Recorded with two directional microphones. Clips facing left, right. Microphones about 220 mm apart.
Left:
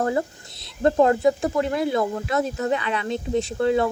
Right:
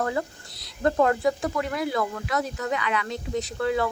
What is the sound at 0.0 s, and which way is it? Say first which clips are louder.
Speech: left 4 dB; 30° left (ahead or behind).